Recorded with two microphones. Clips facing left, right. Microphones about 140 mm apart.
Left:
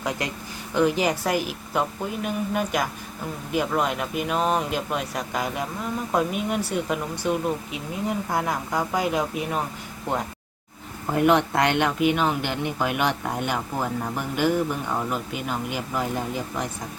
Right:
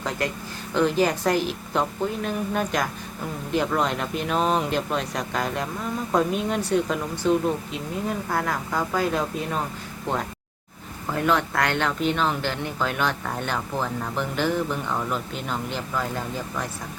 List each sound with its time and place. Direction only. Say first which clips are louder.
0.7 s speech: even; 10° left (ahead or behind)
11.0 s speech: left 4 dB; 20° left (ahead or behind)